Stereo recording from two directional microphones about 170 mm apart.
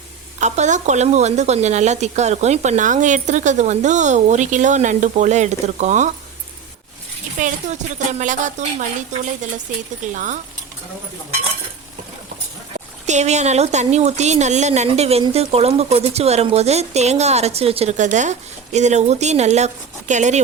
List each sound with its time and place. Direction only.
0.3 s a woman's voice: 45° right (ahead or behind)
7.3 s a woman's voice: 45° right (ahead or behind)
13.1 s speech: 45° right (ahead or behind)